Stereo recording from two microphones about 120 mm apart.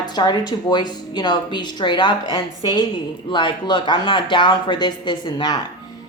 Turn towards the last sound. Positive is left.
turn(degrees=40)  # may be behind; listen again after turning